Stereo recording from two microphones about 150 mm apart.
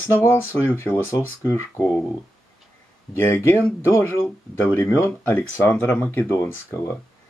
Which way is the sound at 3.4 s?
15° left (ahead or behind).